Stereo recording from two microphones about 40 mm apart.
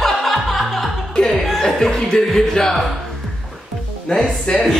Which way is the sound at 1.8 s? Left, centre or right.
Centre.